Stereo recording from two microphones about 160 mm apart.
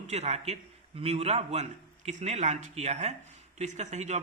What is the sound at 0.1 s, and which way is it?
A man's voice, 45° right (ahead or behind).